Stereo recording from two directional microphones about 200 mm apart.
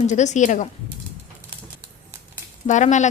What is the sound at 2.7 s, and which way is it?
Speech, 35° left (ahead or behind).